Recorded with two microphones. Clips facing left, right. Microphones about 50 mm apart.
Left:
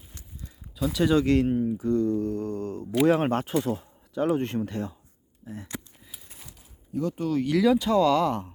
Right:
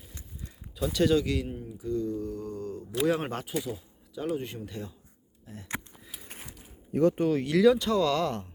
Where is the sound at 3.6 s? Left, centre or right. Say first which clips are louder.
Left 7 dB; left.